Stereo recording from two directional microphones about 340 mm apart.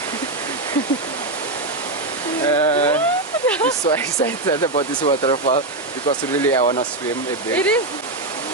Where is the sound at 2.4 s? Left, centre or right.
Centre.